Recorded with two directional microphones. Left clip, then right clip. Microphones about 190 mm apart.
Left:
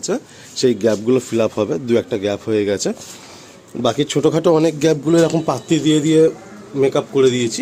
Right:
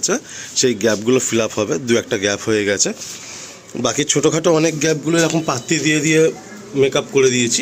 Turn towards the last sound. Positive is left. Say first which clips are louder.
# right 1 dB
turn(degrees=15)  # may be behind; listen again after turning